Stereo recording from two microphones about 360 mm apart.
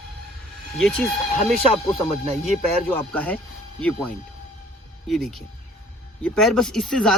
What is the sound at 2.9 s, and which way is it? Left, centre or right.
Speech, centre.